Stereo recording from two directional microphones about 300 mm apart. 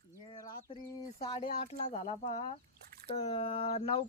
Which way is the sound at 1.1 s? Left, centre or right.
Centre.